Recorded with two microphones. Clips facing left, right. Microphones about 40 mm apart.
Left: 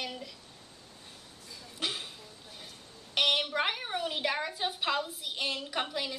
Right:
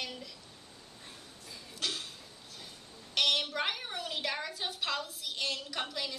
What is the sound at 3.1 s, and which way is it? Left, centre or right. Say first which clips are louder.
A woman's voice: left 2 dB; centre.